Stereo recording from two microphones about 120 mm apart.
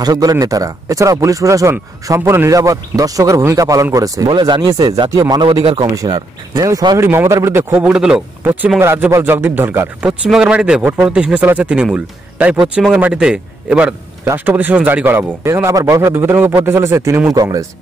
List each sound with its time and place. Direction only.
0.0 s speech: 30° right (ahead or behind)
4.3 s speech: 40° right (ahead or behind)
5.4 s speech: 45° right (ahead or behind)
5.9 s speech: 35° right (ahead or behind)
7.0 s speech: 20° right (ahead or behind)
7.8 s speech: 5° right (ahead or behind)
10.3 s speech: 5° right (ahead or behind); by 17.6 s 30° right (ahead or behind)